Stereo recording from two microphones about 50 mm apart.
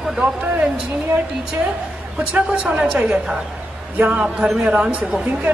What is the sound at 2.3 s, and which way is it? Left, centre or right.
Speech, right.